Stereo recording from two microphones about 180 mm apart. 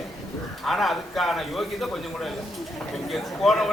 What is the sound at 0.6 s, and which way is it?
Speech, centre (ahead or behind).